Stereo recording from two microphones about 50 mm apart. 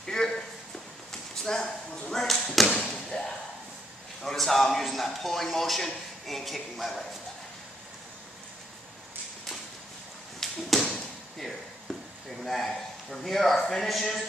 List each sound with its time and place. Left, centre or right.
0.0 s a sound: centre
2.4 s thump: centre
3.1 s slam: centre
4.2 s a man's voice: centre
10.4 s a sound: centre
12.4 s a man's voice: centre